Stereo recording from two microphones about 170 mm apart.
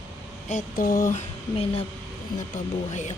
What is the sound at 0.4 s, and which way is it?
Speech, 50° left (ahead or behind).